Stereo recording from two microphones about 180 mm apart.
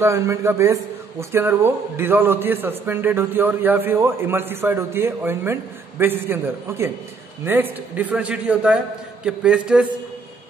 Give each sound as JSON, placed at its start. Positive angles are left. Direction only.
{"t": 0.0, "sound": "speech", "side_deg": -15}